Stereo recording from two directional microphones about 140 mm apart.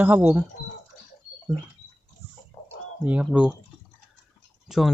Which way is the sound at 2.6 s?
30° left (ahead or behind).